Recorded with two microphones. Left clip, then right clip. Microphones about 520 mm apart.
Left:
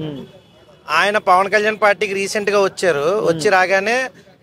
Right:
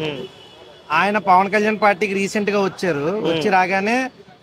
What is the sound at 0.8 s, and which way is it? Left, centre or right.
A man's voice, left.